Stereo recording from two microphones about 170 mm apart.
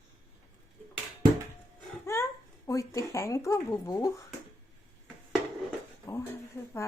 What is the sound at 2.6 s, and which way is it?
A woman's voice, 20° left (ahead or behind).